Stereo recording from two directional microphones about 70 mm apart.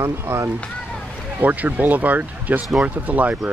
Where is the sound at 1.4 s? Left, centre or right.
Right.